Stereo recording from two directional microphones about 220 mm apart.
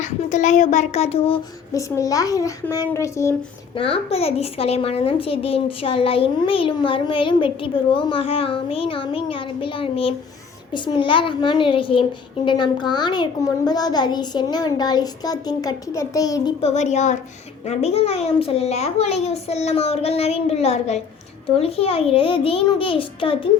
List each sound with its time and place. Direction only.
0.0 s a child's voice: 35° left (ahead or behind)
1.7 s a child's voice: 15° left (ahead or behind)
3.8 s a woman's voice: 25° left (ahead or behind)
16.6 s a child's voice: 30° left (ahead or behind)